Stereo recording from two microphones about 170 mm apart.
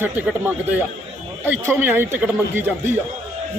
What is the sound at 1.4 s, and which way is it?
A man's voice, 10° right (ahead or behind).